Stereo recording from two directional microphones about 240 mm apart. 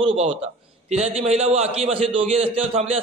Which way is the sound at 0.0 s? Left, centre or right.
Right.